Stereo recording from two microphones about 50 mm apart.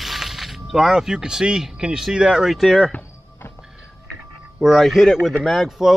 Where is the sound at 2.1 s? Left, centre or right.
Centre.